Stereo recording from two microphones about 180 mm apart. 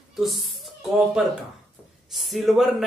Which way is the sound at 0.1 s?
Centre (ahead or behind).